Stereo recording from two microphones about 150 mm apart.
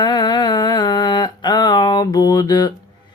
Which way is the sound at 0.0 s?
30° left (ahead or behind).